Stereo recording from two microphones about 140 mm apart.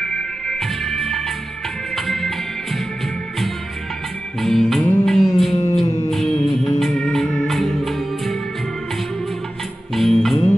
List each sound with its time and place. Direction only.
0.5 s music: centre (ahead or behind)
4.4 s music: centre (ahead or behind)
5.5 s music: 45° left (ahead or behind)
6.0 s music: centre (ahead or behind)
9.9 s music: centre (ahead or behind)